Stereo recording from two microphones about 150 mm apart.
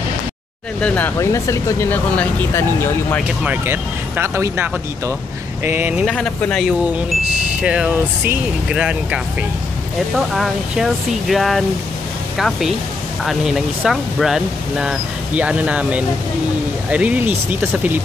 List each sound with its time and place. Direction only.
0.7 s speech: 10° left (ahead or behind)
3.3 s speech: 10° right (ahead or behind)
6.0 s speech: 5° left (ahead or behind)
7.6 s speech: 10° right (ahead or behind)